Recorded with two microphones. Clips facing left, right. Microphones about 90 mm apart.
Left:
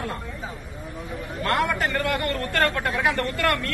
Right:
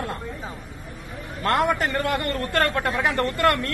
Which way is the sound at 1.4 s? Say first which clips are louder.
Right 2 dB; 40° right (ahead or behind).